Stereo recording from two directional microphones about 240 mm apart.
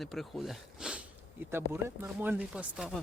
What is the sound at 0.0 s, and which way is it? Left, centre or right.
Speech, centre.